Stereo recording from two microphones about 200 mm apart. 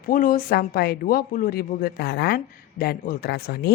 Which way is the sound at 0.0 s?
45° left (ahead or behind).